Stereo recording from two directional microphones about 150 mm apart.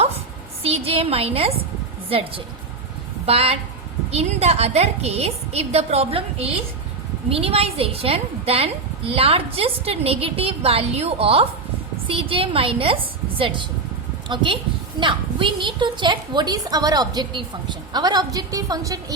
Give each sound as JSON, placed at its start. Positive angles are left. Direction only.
{"t": 0.6, "sound": "a woman's voice", "side_deg": -40}